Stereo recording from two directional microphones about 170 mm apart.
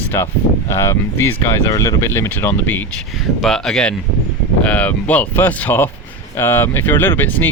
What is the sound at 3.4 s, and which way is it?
Speech, centre (ahead or behind).